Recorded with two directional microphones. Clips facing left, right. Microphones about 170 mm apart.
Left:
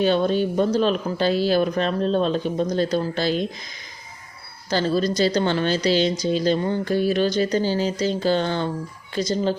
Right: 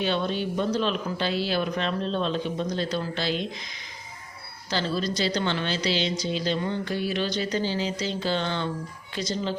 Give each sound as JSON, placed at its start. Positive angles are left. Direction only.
{"t": 0.0, "sound": "a woman's voice", "side_deg": 45}
{"t": 4.7, "sound": "a woman's voice", "side_deg": 45}